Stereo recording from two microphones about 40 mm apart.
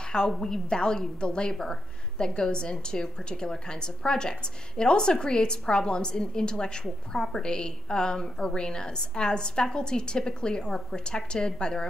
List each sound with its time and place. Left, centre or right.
0.0 s a woman's voice: centre